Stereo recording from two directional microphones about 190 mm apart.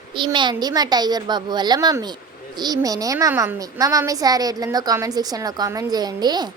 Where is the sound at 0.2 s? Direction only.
25° right (ahead or behind).